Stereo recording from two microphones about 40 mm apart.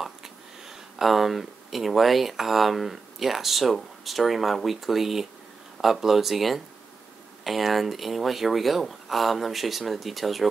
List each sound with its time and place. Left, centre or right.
0.7 s speech: centre